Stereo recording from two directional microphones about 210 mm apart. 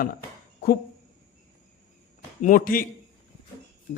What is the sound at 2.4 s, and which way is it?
Speech, 40° left (ahead or behind).